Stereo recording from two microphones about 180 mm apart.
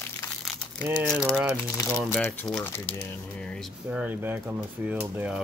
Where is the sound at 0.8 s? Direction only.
15° right (ahead or behind); by 3.7 s 5° left (ahead or behind).